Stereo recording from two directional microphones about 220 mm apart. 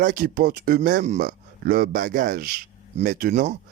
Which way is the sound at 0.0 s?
40° right (ahead or behind).